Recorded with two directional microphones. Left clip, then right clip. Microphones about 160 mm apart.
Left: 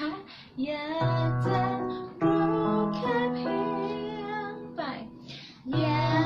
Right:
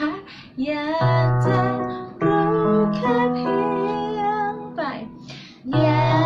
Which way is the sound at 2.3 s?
10° right (ahead or behind).